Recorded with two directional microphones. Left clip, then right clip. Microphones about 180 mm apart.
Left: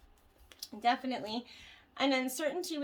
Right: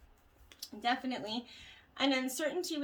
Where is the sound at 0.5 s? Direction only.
35° left (ahead or behind).